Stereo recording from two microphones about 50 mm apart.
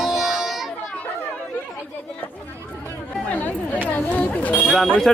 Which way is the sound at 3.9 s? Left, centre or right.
Left.